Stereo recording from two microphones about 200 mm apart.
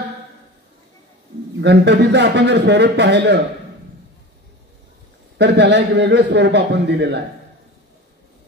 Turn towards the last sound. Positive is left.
turn(degrees=-55)  # may be behind; listen again after turning